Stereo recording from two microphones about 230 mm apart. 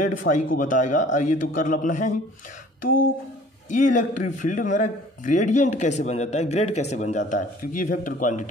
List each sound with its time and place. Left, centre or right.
0.2 s a man's voice: left